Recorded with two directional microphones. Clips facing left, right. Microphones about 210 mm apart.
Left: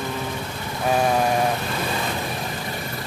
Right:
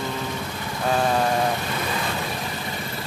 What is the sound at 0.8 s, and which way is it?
Speech, 10° left (ahead or behind).